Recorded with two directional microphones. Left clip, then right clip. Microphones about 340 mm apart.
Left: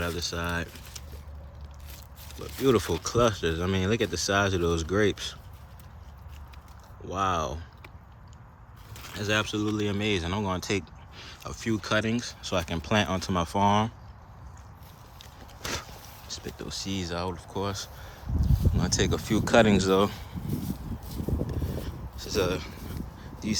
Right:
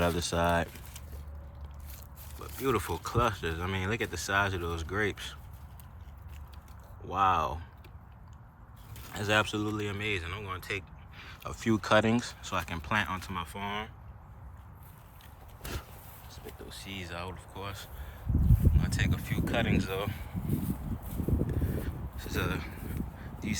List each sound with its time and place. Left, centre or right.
0.0 s speech: centre
2.4 s speech: centre
7.0 s speech: centre
9.1 s speech: centre
15.2 s vehicle: left
16.3 s speech: centre
21.4 s a sound: centre